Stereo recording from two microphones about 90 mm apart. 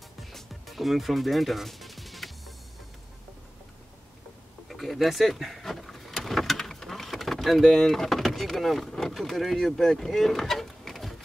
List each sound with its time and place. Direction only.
0.2 s music: centre (ahead or behind)
4.6 s vehicle: centre (ahead or behind)